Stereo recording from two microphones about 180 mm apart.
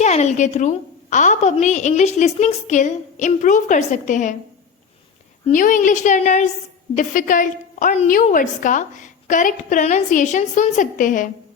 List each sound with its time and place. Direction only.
0.0 s a woman's voice: 40° left (ahead or behind)
5.5 s a woman's voice: 45° left (ahead or behind)